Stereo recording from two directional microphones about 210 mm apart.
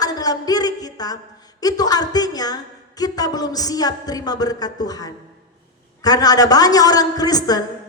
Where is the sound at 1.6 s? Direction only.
20° left (ahead or behind).